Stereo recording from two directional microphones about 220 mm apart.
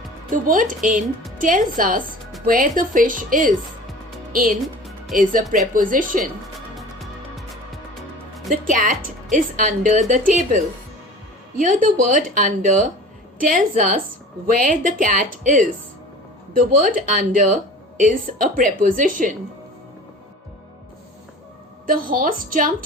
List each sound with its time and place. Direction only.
0.3 s speech: 40° right (ahead or behind)
6.7 s music: centre (ahead or behind)
8.6 s speech: 35° right (ahead or behind)
21.8 s speech: 40° right (ahead or behind)